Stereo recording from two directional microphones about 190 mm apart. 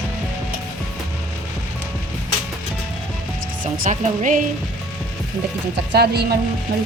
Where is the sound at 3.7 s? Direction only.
40° right (ahead or behind).